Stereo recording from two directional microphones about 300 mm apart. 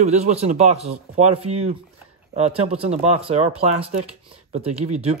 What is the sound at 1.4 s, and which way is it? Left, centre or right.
Speech, right.